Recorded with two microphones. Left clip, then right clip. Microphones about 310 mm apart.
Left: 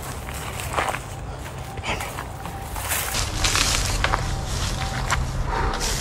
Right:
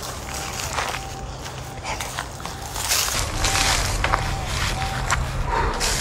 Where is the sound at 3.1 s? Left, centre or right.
Centre.